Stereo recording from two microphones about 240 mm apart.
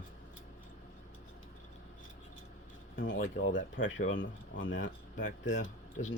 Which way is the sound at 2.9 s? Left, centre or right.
Left.